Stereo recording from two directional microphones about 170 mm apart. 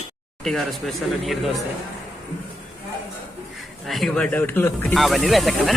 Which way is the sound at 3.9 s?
Centre (ahead or behind).